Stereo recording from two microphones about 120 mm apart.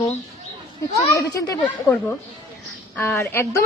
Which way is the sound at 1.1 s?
30° left (ahead or behind).